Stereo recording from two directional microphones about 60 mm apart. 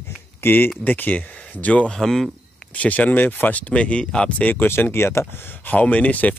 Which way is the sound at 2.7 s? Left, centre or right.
Left.